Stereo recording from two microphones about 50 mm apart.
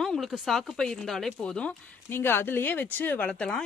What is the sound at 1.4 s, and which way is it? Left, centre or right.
Speech, left.